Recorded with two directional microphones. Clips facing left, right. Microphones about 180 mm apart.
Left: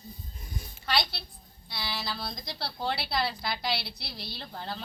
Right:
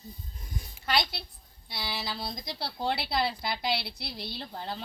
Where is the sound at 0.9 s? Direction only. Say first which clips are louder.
Right 1 dB; 15° right (ahead or behind).